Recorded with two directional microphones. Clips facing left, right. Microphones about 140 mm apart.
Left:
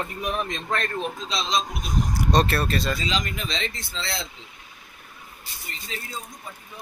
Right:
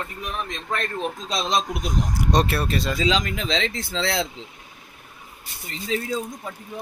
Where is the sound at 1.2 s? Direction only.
50° right (ahead or behind).